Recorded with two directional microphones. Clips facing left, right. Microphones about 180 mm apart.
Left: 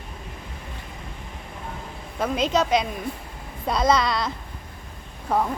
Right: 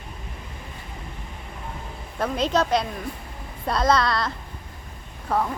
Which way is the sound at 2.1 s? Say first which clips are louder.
Even; 5° left (ahead or behind).